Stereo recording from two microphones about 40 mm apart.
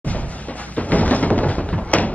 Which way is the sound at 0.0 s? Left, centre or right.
Left.